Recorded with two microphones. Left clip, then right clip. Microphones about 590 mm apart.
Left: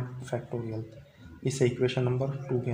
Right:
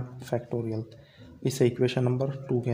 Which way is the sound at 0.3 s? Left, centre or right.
Right.